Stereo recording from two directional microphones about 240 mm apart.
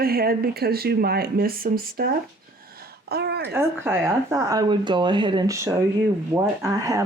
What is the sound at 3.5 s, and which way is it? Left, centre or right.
Speech, centre.